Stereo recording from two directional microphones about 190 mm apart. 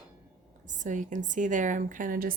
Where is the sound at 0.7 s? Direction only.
40° right (ahead or behind).